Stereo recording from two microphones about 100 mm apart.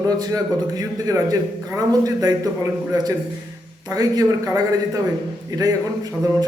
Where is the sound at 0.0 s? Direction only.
40° right (ahead or behind).